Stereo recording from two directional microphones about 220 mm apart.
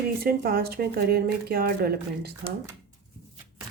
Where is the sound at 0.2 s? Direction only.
45° right (ahead or behind).